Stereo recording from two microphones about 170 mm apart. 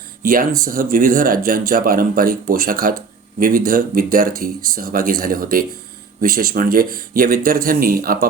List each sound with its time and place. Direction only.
0.2 s speech: 55° right (ahead or behind)